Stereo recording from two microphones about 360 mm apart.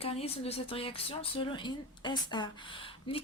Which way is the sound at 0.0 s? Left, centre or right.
Centre.